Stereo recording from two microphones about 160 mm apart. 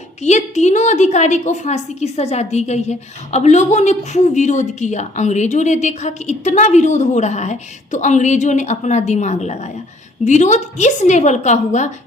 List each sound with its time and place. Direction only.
0.2 s a woman's voice: 45° left (ahead or behind)